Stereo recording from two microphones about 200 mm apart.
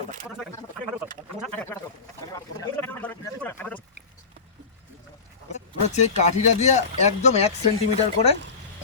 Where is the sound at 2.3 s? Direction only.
15° left (ahead or behind).